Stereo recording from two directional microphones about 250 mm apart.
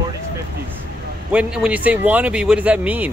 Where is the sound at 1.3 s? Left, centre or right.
Centre.